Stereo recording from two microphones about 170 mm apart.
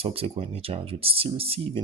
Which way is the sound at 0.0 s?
35° right (ahead or behind).